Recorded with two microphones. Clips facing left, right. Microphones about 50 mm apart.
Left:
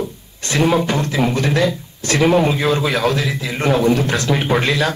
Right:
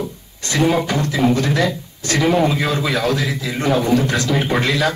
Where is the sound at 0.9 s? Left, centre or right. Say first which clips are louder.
Right 1 dB; left.